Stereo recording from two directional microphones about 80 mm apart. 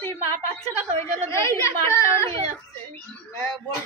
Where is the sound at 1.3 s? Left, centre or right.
Left.